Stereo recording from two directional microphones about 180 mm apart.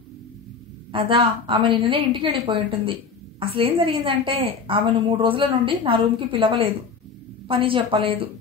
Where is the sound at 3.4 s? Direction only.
30° right (ahead or behind).